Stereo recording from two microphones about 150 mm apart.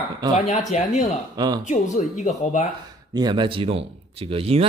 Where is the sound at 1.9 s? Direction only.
50° left (ahead or behind).